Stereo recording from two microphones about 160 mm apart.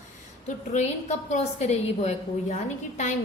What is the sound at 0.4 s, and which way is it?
A woman's voice, 45° left (ahead or behind).